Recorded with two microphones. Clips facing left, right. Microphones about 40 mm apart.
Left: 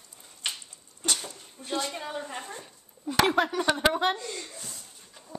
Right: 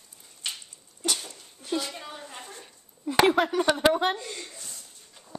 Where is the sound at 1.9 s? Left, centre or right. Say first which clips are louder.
Left 5 dB; left.